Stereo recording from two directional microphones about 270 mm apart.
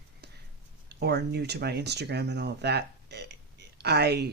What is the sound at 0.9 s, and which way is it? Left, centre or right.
Speech, right.